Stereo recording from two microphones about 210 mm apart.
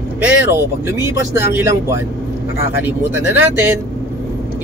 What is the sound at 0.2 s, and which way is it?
Speech, 10° right (ahead or behind).